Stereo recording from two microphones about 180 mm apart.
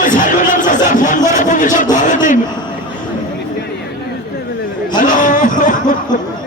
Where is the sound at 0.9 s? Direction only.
45° left (ahead or behind).